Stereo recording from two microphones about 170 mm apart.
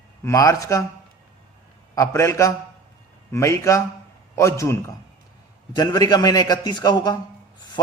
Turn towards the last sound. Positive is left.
turn(degrees=25)  # may be behind; listen again after turning